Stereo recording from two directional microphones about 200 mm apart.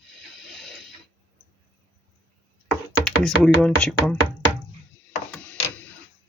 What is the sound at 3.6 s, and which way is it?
Speech, 5° left (ahead or behind).